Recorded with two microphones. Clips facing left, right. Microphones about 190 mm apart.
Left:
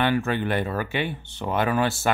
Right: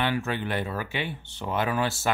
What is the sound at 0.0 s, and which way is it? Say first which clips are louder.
Speech: left 5 dB; 55° left (ahead or behind).